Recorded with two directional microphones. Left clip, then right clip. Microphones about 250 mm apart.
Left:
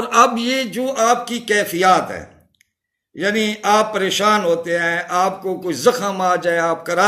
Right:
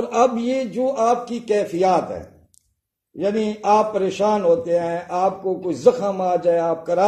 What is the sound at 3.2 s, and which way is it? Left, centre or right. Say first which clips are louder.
Mantra: left 3 dB; centre.